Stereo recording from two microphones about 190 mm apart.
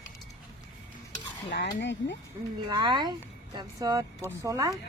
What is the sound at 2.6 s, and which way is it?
Speech, 25° right (ahead or behind).